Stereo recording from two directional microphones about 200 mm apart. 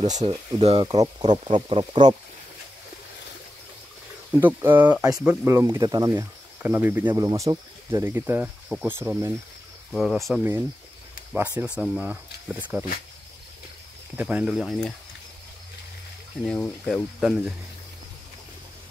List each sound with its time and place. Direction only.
0.0 s speech: 35° right (ahead or behind); by 1.1 s 20° right (ahead or behind)
1.2 s speech: 30° right (ahead or behind)
4.4 s speech: 10° right (ahead or behind)
9.9 s speech: centre (ahead or behind)
14.1 s speech: 5° right (ahead or behind)
16.4 s speech: 5° left (ahead or behind)